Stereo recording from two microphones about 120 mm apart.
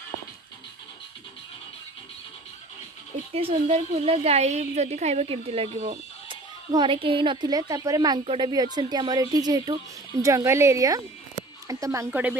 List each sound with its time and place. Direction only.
3.3 s a woman's voice: 55° right (ahead or behind)
6.2 s a woman's voice: 40° right (ahead or behind); by 12.1 s 25° right (ahead or behind)
12.1 s a woman's voice: 15° right (ahead or behind)